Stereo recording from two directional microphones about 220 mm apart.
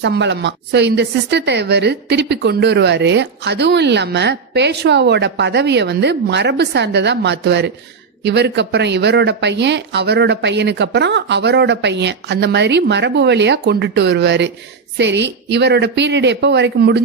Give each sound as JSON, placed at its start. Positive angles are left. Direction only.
{"t": 0.0, "sound": "a woman's voice", "side_deg": -50}